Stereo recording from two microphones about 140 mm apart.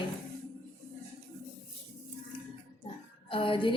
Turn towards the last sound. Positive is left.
turn(degrees=35)  # may be behind; listen again after turning